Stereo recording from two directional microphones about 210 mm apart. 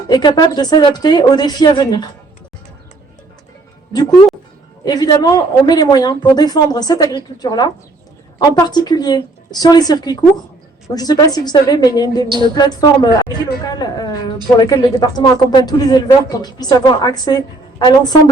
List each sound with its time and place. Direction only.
0.1 s speech: 20° left (ahead or behind)
4.9 s a woman's voice: 20° left (ahead or behind)